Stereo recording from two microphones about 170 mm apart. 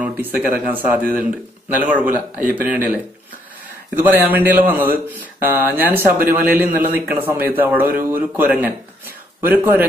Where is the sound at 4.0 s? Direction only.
10° right (ahead or behind).